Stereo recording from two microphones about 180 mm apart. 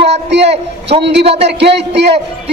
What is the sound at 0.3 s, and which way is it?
Speech, 70° right (ahead or behind).